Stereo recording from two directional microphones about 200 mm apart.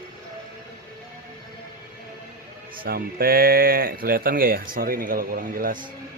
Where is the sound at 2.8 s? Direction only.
50° right (ahead or behind).